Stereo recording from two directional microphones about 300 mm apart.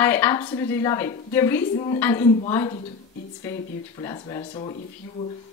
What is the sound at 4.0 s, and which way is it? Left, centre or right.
Speech, centre.